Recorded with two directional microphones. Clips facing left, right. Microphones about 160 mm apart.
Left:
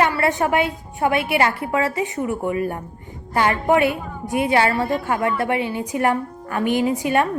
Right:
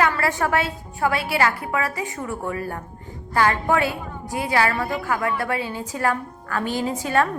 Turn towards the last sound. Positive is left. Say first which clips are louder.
# left 3 dB
turn(degrees=20)  # may be behind; listen again after turning